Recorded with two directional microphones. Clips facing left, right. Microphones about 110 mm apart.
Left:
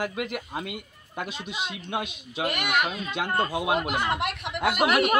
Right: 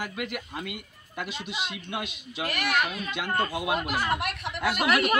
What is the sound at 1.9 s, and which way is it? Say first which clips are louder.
Speech: left 3 dB; 45° left (ahead or behind).